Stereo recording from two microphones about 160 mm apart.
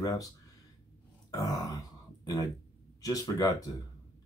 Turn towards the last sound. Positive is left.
turn(degrees=20)  # may be behind; listen again after turning